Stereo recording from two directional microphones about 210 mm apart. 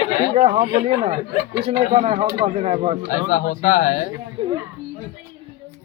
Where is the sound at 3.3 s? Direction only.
40° left (ahead or behind).